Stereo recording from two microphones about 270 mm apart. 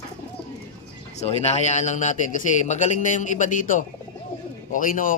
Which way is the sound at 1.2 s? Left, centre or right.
Left.